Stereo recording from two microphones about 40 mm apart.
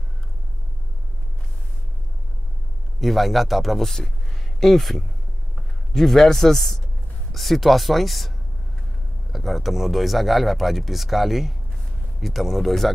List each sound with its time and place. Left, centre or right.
3.0 s a man's voice: centre
9.3 s speech: centre